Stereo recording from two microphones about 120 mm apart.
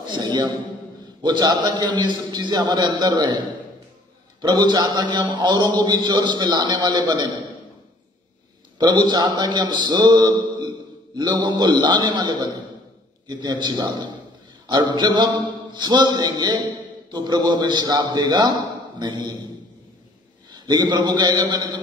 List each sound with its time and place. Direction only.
0.0 s a man's voice: 40° right (ahead or behind)
8.7 s a man's voice: 35° right (ahead or behind)
20.5 s a man's voice: 35° right (ahead or behind)